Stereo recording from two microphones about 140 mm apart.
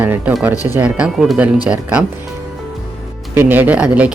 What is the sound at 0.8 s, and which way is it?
Speech, 10° right (ahead or behind).